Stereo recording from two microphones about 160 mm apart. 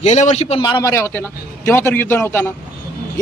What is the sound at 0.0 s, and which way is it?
Speech, 45° left (ahead or behind).